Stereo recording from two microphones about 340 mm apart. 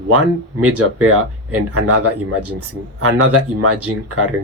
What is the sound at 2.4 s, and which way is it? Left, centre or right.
Speech, right.